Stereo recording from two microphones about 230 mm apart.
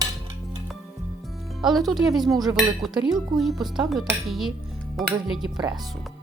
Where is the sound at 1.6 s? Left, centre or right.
Centre.